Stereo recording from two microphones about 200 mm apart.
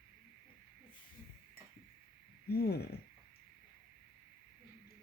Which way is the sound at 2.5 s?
50° left (ahead or behind).